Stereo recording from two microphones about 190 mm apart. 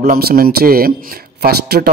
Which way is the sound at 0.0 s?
45° right (ahead or behind).